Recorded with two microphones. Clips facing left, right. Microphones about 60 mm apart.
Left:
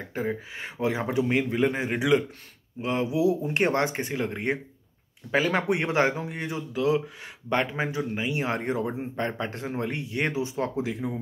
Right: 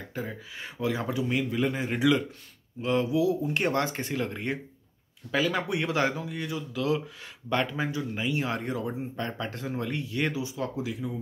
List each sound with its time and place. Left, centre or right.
0.1 s speech: left